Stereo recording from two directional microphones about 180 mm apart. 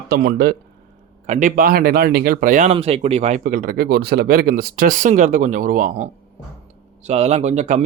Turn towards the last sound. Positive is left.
turn(degrees=-40)  # may be behind; listen again after turning